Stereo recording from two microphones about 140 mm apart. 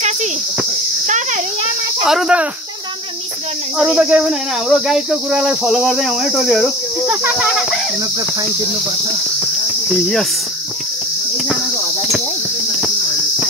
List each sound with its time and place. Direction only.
1.0 s a child's voice: 60° right (ahead or behind)
2.0 s cricket: 5° right (ahead or behind)
3.7 s cricket: 5° right (ahead or behind)
7.1 s speech: 15° right (ahead or behind)
9.8 s cricket: centre (ahead or behind)